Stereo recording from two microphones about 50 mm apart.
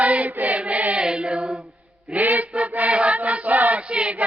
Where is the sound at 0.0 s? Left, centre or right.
Right.